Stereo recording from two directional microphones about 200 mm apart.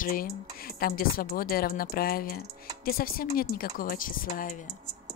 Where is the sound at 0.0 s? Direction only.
45° left (ahead or behind).